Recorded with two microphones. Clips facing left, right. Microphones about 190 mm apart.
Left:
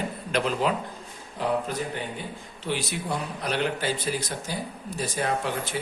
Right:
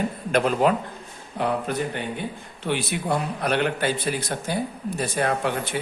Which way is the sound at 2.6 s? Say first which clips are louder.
Right 4 dB; 60° right (ahead or behind).